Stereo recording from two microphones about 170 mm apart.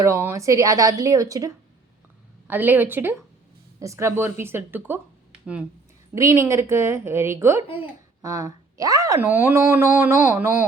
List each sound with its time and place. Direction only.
0.0 s a woman's voice: 15° right (ahead or behind)
6.1 s speech: 15° right (ahead or behind)